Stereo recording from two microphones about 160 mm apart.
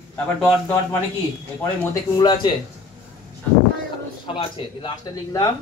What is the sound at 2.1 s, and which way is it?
Speech, 25° left (ahead or behind).